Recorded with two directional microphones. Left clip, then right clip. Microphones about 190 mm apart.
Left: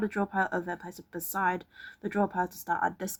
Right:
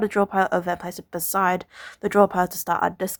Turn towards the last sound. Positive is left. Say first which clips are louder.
# right 7 dB
turn(degrees=-30)  # may be behind; listen again after turning